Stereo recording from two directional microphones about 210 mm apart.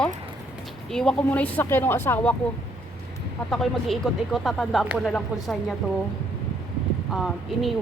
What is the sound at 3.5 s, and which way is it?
Speech, centre (ahead or behind).